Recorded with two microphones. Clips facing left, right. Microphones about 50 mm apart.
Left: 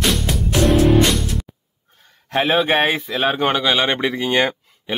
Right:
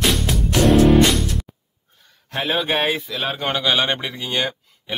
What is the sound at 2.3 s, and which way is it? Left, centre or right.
A man's voice, left.